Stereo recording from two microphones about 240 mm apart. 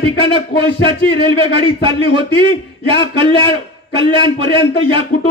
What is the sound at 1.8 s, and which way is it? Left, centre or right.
Speech, right.